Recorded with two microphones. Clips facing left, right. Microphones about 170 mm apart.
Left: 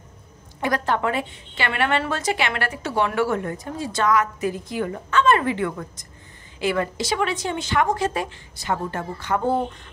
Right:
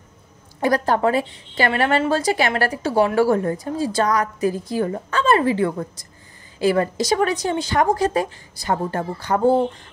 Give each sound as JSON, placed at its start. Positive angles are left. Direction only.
{"t": 0.6, "sound": "a woman's voice", "side_deg": -35}